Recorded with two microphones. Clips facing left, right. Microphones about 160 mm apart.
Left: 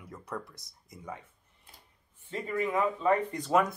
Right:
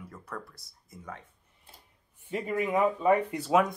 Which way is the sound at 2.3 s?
15° right (ahead or behind).